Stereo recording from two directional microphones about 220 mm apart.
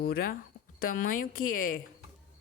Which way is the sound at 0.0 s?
40° left (ahead or behind).